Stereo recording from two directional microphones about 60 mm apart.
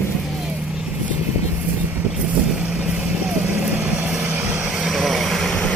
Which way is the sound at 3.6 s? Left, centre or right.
Right.